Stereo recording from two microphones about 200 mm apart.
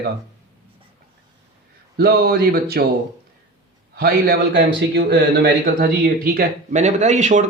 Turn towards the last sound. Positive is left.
turn(degrees=-35)  # may be behind; listen again after turning